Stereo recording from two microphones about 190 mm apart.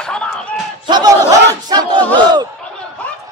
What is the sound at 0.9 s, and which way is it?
Battle cry, 20° right (ahead or behind).